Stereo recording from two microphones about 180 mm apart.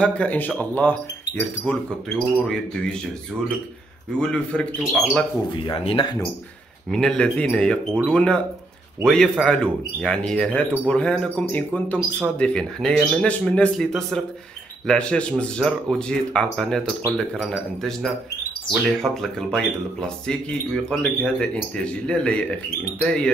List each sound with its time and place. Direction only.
0.0 s speech: 10° left (ahead or behind)
4.2 s speech: 5° left (ahead or behind)
5.5 s speech: 25° left (ahead or behind)
6.9 s speech: 5° left (ahead or behind)